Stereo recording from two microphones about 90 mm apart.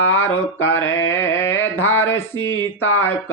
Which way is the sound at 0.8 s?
25° left (ahead or behind).